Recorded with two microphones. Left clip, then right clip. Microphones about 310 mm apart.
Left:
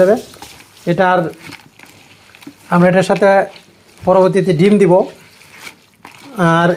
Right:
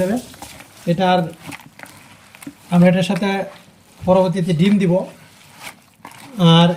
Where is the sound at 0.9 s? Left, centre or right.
Left.